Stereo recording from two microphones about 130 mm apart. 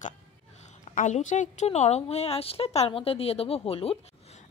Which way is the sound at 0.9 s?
70° left (ahead or behind).